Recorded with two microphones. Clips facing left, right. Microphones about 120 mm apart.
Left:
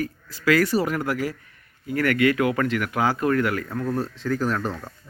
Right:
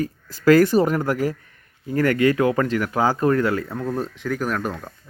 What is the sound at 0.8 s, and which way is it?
Speech, 40° right (ahead or behind).